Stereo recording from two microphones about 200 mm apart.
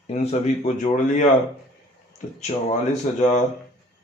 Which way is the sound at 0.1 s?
35° left (ahead or behind).